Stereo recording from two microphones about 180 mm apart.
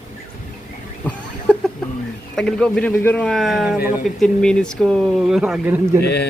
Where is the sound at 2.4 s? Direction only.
5° left (ahead or behind).